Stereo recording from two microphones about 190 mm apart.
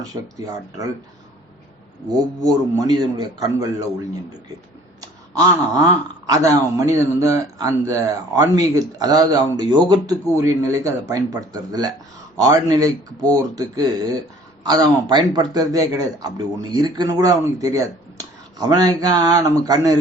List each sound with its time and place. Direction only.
0.1 s speech: 20° right (ahead or behind)
2.4 s speech: 20° right (ahead or behind)
4.9 s speech: 20° right (ahead or behind)